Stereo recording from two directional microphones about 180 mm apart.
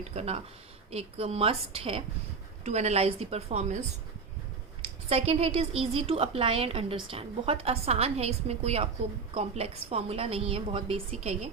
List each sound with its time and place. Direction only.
0.1 s a woman's voice: 35° right (ahead or behind)